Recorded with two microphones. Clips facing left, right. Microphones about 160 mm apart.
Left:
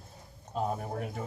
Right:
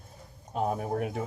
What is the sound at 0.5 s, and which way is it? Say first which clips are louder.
Speech: right 4 dB; 60° right (ahead or behind).